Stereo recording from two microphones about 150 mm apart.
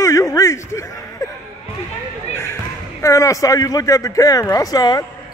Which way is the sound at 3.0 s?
20° left (ahead or behind).